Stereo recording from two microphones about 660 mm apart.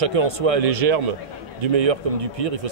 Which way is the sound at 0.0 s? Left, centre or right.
Right.